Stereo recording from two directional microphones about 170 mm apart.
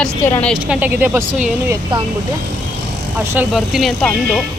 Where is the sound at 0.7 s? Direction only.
10° right (ahead or behind).